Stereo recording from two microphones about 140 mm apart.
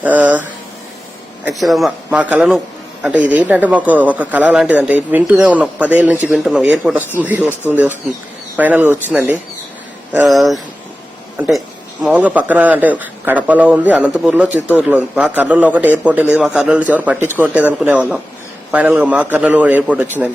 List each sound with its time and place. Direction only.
0.0 s a sound: 10° right (ahead or behind)
1.5 s speech: centre (ahead or behind)
2.0 s a man's voice: 10° right (ahead or behind)
10.2 s speech: centre (ahead or behind)
12.0 s a man's voice: 10° right (ahead or behind)